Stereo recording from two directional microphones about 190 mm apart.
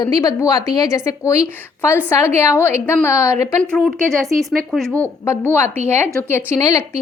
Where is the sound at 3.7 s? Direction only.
5° left (ahead or behind).